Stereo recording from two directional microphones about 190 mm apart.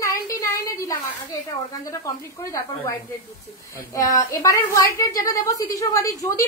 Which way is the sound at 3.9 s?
20° left (ahead or behind).